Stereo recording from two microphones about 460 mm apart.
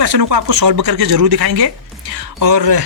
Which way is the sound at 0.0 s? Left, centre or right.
Right.